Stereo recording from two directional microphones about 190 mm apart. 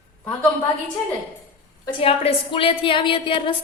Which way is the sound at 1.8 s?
30° left (ahead or behind).